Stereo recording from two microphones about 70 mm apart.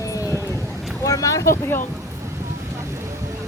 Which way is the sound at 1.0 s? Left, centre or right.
Left.